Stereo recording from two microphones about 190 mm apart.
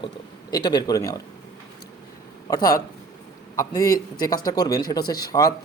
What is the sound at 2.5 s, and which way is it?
Speech, 20° left (ahead or behind).